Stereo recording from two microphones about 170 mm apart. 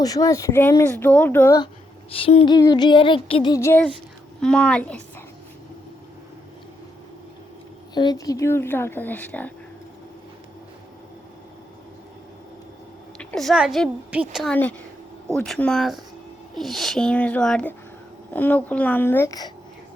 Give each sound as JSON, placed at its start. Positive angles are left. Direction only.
{"t": 0.0, "sound": "speech", "side_deg": 20}
{"t": 2.0, "sound": "a sound", "side_deg": 35}
{"t": 3.5, "sound": "a woman's voice", "side_deg": 15}
{"t": 7.9, "sound": "speech", "side_deg": 25}
{"t": 13.1, "sound": "a child's voice", "side_deg": 0}
{"t": 14.5, "sound": "speech", "side_deg": 10}